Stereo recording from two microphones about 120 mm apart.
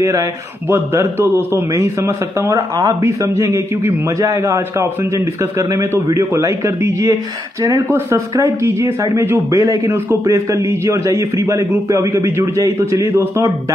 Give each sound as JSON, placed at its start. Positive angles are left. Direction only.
{"t": 0.0, "sound": "a man's voice", "side_deg": -25}